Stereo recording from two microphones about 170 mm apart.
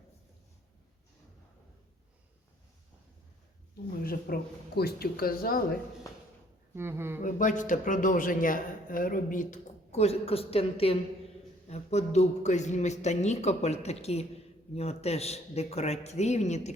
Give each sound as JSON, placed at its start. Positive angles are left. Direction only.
{"t": 4.0, "sound": "speech", "side_deg": 60}
{"t": 6.7, "sound": "speech", "side_deg": -15}
{"t": 7.2, "sound": "a man's voice", "side_deg": 50}